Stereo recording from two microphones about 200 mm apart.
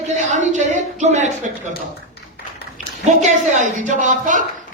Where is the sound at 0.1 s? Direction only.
35° right (ahead or behind).